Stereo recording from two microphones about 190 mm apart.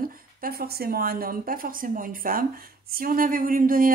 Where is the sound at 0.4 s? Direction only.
50° right (ahead or behind).